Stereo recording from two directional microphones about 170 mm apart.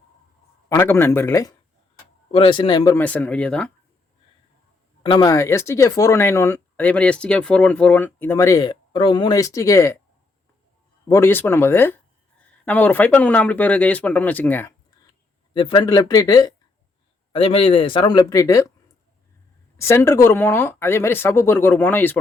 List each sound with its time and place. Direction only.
0.7 s speech: 15° left (ahead or behind)
2.3 s speech: 30° left (ahead or behind)
2.9 s speech: 10° left (ahead or behind)
5.0 s speech: 25° left (ahead or behind)
11.1 s speech: 15° left (ahead or behind)
15.5 s speech: 30° left (ahead or behind)
17.3 s speech: 35° left (ahead or behind); by 18.7 s 20° left (ahead or behind)
19.8 s speech: 15° left (ahead or behind)